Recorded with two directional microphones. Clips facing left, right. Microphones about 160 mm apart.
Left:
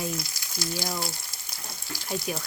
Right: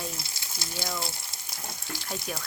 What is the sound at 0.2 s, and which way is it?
Speech, 25° right (ahead or behind).